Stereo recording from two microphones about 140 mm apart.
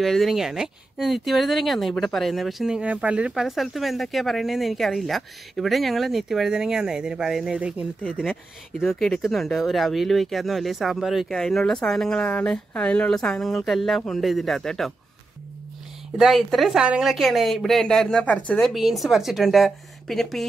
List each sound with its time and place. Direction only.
0.0 s speech: centre (ahead or behind)
8.0 s speech: centre (ahead or behind)
16.2 s speech: centre (ahead or behind)
18.7 s speech: centre (ahead or behind)